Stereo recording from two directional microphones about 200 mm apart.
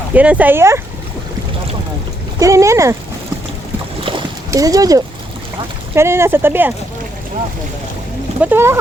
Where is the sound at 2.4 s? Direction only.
15° right (ahead or behind).